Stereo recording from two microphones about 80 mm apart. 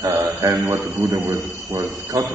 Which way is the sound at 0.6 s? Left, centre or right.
Right.